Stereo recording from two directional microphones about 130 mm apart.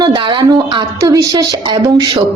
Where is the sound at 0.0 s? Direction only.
35° right (ahead or behind).